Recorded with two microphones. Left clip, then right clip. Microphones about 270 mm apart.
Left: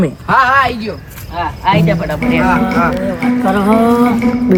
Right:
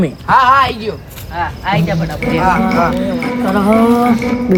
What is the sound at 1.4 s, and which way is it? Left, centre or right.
Speech, centre.